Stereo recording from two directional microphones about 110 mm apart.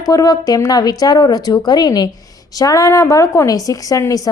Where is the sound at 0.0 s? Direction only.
35° left (ahead or behind).